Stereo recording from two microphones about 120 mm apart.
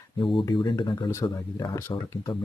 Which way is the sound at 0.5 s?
40° left (ahead or behind).